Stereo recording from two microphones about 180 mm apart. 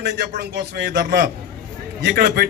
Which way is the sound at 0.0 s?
65° right (ahead or behind).